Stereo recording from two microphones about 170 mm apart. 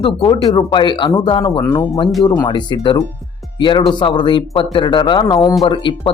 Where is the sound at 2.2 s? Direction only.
25° left (ahead or behind).